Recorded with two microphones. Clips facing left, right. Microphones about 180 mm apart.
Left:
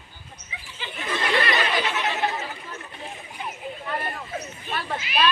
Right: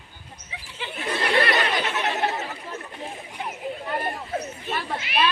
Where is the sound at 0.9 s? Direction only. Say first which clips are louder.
Right 2 dB; 50° right (ahead or behind).